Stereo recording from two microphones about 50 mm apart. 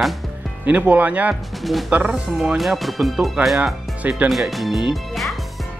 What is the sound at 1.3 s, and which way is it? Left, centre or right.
Speech, centre.